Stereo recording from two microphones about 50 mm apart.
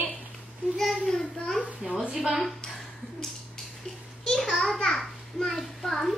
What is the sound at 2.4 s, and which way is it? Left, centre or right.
Speech, centre.